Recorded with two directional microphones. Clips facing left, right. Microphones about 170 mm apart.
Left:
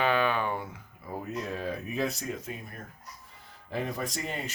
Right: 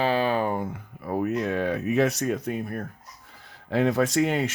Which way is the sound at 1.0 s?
70° right (ahead or behind).